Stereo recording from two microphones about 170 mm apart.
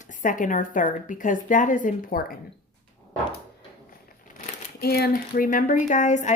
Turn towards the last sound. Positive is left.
turn(degrees=45)  # may be behind; listen again after turning